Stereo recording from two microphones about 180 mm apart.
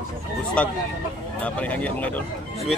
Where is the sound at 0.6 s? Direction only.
5° left (ahead or behind).